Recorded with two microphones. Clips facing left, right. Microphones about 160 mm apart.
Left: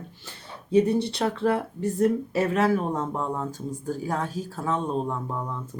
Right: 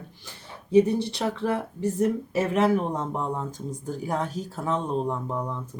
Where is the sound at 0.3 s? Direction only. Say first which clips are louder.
Left 1 dB; 15° right (ahead or behind).